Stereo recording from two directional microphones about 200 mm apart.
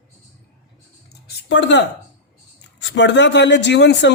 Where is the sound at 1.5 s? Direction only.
60° left (ahead or behind).